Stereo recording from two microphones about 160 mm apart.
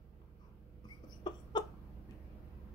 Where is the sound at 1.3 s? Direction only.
25° left (ahead or behind).